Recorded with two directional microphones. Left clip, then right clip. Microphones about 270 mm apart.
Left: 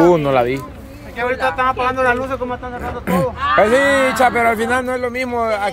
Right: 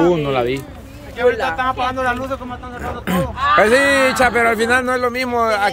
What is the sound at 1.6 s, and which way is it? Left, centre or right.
Speech, centre.